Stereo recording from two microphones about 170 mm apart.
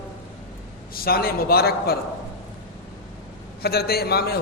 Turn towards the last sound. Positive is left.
turn(degrees=65)  # may be behind; listen again after turning